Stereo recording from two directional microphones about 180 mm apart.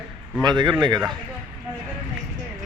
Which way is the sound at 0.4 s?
25° right (ahead or behind).